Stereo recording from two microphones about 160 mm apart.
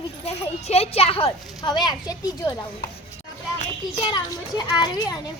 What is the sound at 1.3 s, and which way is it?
Speech, 25° left (ahead or behind).